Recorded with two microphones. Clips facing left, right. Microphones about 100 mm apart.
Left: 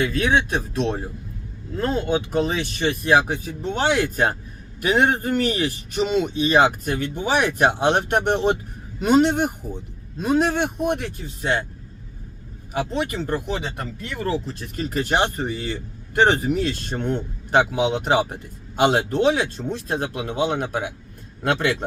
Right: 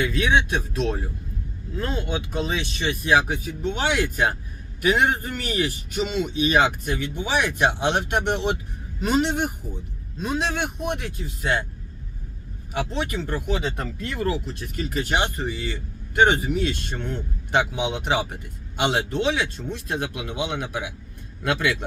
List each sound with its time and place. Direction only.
0.0 s speech: 35° left (ahead or behind)
12.7 s speech: 35° left (ahead or behind)
14.8 s speech: 40° left (ahead or behind)